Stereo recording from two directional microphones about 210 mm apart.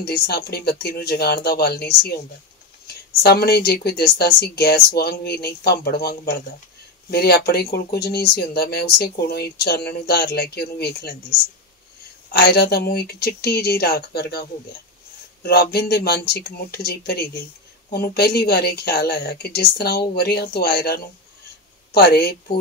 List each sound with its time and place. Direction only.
0.3 s speech: 50° left (ahead or behind)
2.9 s speech: 50° left (ahead or behind)
12.3 s speech: 45° left (ahead or behind)
15.4 s speech: 50° left (ahead or behind)